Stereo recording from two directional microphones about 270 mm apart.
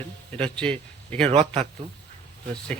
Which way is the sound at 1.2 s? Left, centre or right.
Right.